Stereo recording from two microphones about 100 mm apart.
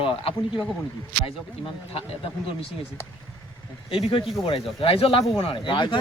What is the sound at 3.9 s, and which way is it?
Speech, 60° left (ahead or behind).